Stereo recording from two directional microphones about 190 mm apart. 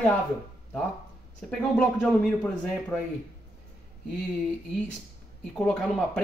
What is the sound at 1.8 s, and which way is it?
Speech, 5° left (ahead or behind).